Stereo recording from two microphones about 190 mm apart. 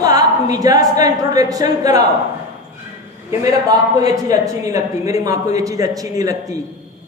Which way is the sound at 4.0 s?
20° right (ahead or behind).